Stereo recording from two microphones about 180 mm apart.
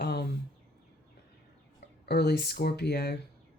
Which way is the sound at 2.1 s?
65° left (ahead or behind).